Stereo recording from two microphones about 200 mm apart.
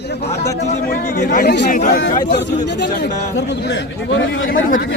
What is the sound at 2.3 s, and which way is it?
Speech, 60° left (ahead or behind).